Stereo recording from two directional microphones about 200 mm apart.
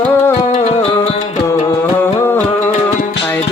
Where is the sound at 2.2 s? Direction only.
10° left (ahead or behind).